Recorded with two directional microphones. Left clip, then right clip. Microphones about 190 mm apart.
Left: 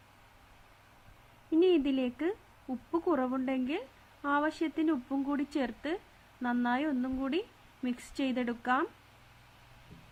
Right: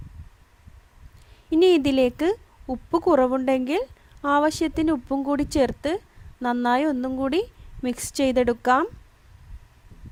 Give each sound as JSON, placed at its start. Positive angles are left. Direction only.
{"t": 1.5, "sound": "a woman's voice", "side_deg": -60}